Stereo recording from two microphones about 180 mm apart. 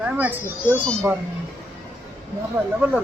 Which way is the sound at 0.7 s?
5° left (ahead or behind).